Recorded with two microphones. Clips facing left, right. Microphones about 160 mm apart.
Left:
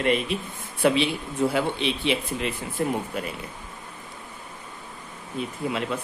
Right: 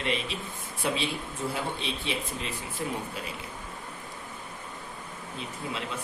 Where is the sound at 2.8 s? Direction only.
55° left (ahead or behind).